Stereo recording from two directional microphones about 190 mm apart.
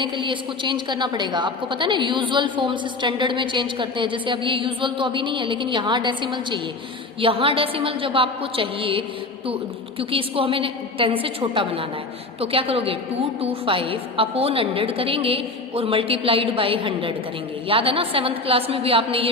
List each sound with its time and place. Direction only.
0.0 s a woman's voice: 25° right (ahead or behind)